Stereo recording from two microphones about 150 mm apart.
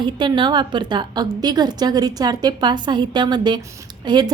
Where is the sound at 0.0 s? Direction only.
30° right (ahead or behind).